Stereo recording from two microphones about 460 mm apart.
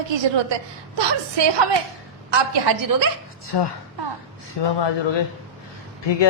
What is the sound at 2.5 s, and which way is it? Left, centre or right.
Speech, right.